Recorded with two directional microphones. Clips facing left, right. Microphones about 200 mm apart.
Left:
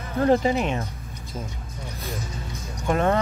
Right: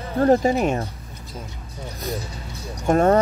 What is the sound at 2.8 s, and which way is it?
Speech, 45° right (ahead or behind).